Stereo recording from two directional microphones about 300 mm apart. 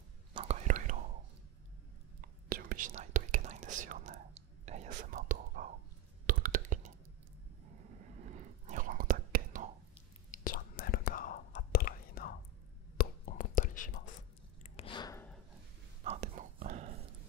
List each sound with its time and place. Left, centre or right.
0.3 s whispering: centre
2.2 s whispering: right
8.3 s whispering: right
9.9 s whispering: left
14.6 s a sound: centre
16.0 s whispering: right